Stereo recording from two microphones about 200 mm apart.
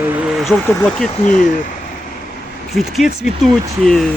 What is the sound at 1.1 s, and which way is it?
Speech, 40° left (ahead or behind).